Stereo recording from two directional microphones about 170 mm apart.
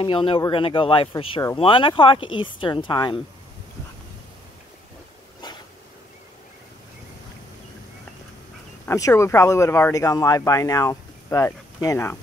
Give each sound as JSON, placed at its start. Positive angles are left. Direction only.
{"t": 0.0, "sound": "speech", "side_deg": 30}
{"t": 8.8, "sound": "speech", "side_deg": 15}